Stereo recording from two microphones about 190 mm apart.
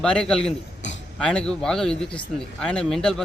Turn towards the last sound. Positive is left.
turn(degrees=5)  # may be behind; listen again after turning